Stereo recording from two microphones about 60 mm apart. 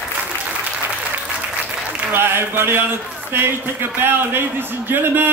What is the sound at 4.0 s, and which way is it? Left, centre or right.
Speech, right.